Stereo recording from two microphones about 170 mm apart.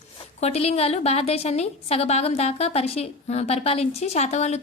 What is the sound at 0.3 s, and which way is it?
A woman's voice, 40° left (ahead or behind).